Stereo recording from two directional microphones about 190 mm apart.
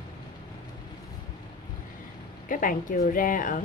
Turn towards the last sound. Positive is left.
turn(degrees=45)  # may be behind; listen again after turning